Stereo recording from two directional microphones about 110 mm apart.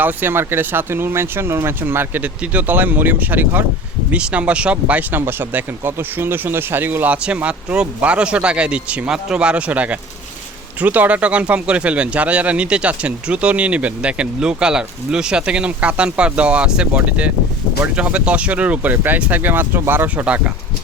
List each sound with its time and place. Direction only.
0.0 s speech: 15° right (ahead or behind)